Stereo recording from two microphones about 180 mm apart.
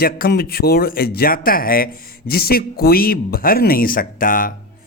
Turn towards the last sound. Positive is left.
turn(degrees=50)  # may be behind; listen again after turning